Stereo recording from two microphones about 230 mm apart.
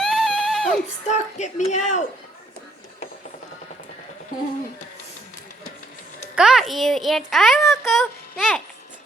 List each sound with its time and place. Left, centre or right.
0.0 s a sound: centre
1.0 s a woman's voice: left
6.3 s a child's voice: centre